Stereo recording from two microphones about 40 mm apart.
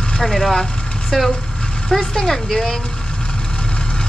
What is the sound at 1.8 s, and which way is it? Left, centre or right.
Speech, centre.